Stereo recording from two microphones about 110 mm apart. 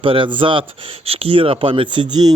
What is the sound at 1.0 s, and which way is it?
Speech, 60° right (ahead or behind).